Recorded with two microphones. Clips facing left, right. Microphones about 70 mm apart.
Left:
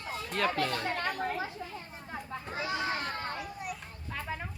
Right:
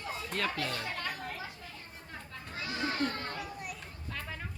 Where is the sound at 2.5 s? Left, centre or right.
Centre.